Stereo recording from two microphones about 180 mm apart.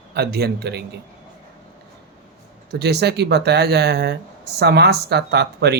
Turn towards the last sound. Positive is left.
turn(degrees=-65)  # may be behind; listen again after turning